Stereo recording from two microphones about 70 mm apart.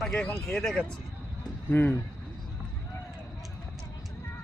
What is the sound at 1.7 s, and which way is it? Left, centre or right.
Speech, left.